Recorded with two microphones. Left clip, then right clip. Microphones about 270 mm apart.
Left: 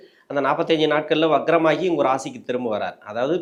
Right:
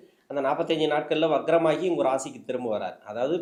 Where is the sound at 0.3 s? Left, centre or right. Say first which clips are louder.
Left 6 dB; left.